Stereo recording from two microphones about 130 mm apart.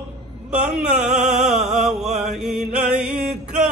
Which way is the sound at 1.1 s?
65° right (ahead or behind).